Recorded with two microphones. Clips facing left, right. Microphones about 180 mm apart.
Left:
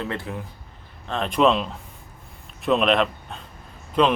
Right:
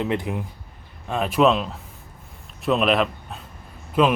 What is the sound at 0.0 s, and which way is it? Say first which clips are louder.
Speech: right 5 dB; 15° right (ahead or behind).